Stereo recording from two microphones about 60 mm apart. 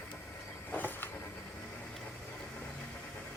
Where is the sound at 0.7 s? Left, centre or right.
Left.